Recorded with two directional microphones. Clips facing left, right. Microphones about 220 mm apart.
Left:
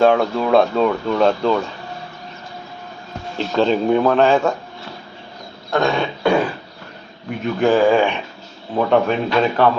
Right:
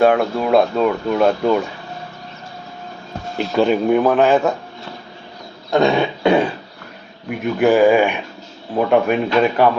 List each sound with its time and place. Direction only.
0.0 s speech: 5° right (ahead or behind)
3.3 s speech: 10° right (ahead or behind)
5.7 s a sound: 20° right (ahead or behind)
7.3 s speech: 10° right (ahead or behind)